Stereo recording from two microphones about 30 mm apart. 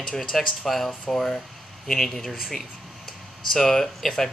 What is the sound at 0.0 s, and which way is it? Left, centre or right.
Speech, centre.